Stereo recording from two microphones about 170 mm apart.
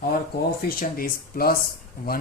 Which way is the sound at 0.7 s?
60° left (ahead or behind).